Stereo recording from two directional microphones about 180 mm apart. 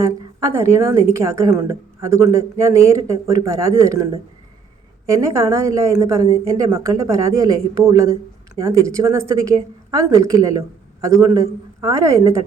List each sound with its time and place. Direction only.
0.0 s a woman's voice: 15° right (ahead or behind)